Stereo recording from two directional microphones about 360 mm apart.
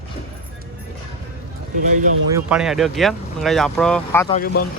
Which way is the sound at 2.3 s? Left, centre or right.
Centre.